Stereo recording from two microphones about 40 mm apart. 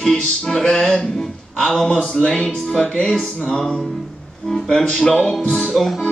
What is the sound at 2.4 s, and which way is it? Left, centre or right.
Speech, centre.